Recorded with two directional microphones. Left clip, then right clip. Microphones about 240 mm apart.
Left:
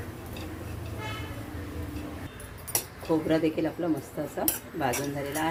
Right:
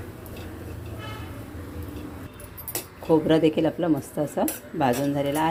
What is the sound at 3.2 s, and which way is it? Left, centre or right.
Speech, right.